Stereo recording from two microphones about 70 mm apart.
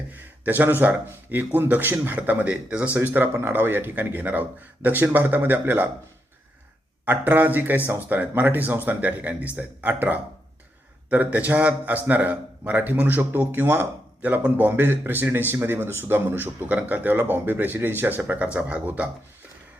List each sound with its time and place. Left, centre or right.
0.1 s speech: right
7.0 s speech: right